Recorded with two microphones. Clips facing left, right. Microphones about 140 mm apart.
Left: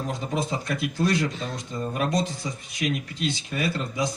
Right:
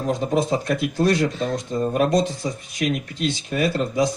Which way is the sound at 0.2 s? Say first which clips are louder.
Right 7 dB; 40° right (ahead or behind).